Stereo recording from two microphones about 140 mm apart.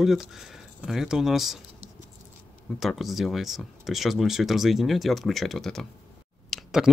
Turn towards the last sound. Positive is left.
turn(degrees=0)  # may be behind; listen again after turning